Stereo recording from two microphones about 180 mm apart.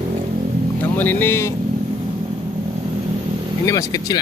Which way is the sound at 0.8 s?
10° left (ahead or behind).